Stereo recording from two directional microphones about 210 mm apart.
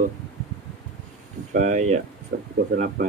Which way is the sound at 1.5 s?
35° right (ahead or behind).